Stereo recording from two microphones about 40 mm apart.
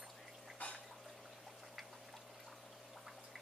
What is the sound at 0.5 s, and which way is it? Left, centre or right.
Water, left.